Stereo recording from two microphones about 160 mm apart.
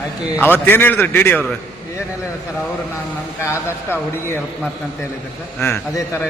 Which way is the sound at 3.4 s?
15° left (ahead or behind).